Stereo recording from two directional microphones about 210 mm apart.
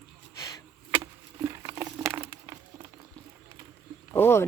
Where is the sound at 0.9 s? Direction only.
15° right (ahead or behind).